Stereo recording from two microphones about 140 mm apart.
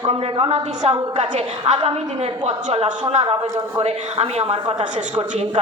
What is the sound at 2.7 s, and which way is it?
A woman's voice, 55° right (ahead or behind).